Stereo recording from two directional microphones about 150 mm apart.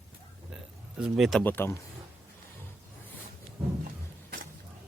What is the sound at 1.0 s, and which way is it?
Speech, 5° right (ahead or behind).